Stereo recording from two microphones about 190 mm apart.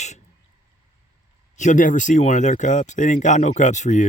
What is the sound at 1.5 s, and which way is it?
Speech, 40° left (ahead or behind).